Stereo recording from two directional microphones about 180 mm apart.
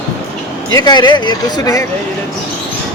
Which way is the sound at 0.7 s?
25° left (ahead or behind).